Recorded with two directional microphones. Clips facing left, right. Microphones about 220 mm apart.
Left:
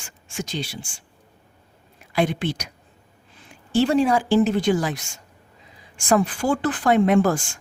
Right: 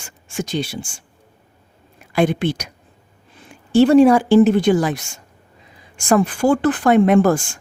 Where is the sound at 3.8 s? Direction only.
60° right (ahead or behind).